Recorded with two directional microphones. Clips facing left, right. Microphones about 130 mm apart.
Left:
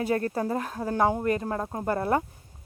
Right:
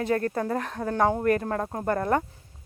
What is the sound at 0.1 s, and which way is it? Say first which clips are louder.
Speech: right 2 dB; 25° left (ahead or behind).